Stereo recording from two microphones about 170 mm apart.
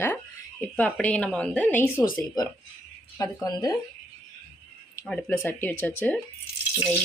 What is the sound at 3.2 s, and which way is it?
Speech, 20° left (ahead or behind).